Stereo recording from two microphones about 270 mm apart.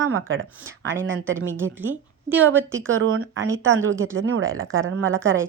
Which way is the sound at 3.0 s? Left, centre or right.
Right.